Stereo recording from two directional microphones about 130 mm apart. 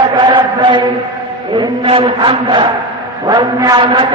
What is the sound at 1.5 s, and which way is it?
Chant, 40° right (ahead or behind).